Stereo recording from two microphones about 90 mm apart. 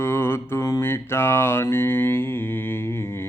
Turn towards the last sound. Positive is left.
turn(degrees=25)  # may be behind; listen again after turning